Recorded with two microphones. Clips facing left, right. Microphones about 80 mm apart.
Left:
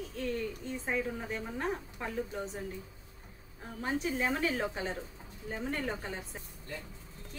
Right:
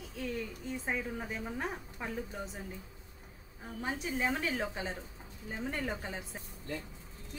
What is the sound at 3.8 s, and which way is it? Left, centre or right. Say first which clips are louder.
A woman's voice: left 3 dB; centre.